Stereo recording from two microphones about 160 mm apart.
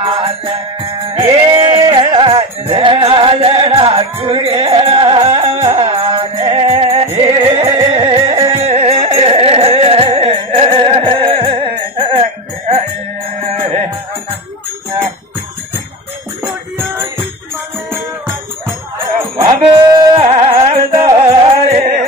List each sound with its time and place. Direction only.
0.0 s music: 30° right (ahead or behind)
1.5 s music: 25° right (ahead or behind)
7.3 s carnatic music: 35° right (ahead or behind)
16.7 s music: 15° right (ahead or behind)
19.4 s jingle bell: 25° right (ahead or behind)
20.2 s carnatic music: 35° right (ahead or behind)
21.0 s music: 35° right (ahead or behind)